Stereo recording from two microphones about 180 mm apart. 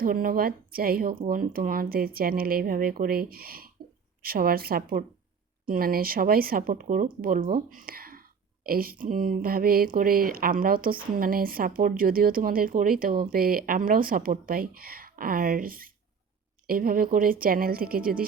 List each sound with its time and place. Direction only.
0.0 s speech: 50° right (ahead or behind)